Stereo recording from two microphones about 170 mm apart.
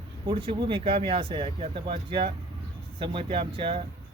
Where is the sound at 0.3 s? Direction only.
30° right (ahead or behind).